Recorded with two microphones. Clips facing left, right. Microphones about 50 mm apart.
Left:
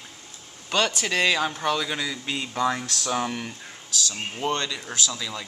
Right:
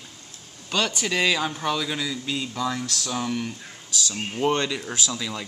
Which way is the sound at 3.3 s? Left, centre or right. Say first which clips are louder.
Right 4 dB; centre.